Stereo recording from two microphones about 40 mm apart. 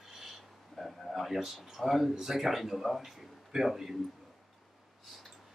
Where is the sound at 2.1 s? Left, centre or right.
Centre.